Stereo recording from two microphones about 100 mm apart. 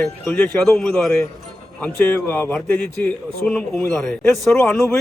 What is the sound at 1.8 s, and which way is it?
A man's voice, 20° left (ahead or behind).